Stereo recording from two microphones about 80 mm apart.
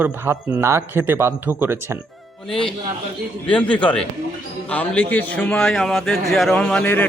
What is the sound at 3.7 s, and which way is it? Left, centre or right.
A man's voice, centre.